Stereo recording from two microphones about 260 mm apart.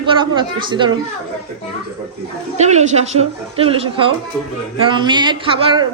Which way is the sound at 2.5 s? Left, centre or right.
Right.